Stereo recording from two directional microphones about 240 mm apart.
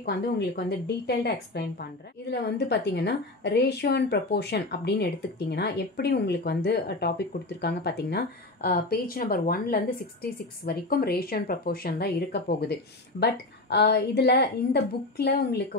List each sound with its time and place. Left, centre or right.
0.0 s a woman's voice: left